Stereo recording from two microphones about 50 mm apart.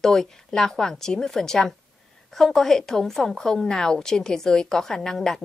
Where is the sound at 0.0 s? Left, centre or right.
Centre.